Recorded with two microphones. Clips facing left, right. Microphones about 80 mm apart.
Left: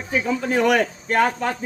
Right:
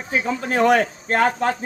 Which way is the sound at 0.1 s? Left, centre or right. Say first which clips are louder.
Left 1 dB; right.